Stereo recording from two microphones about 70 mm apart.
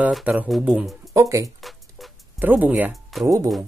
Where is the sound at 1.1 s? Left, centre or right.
Right.